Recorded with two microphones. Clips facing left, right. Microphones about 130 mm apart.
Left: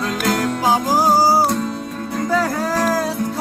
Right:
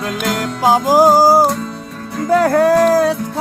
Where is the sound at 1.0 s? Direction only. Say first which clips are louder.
Right 6 dB; 50° right (ahead or behind).